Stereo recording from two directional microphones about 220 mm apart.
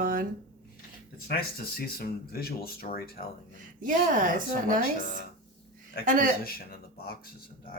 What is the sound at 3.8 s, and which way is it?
A woman's voice, 35° right (ahead or behind).